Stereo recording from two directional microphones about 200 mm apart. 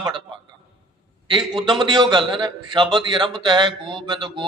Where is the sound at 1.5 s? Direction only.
25° right (ahead or behind).